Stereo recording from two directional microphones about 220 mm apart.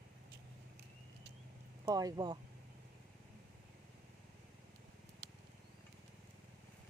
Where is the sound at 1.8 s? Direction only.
15° right (ahead or behind).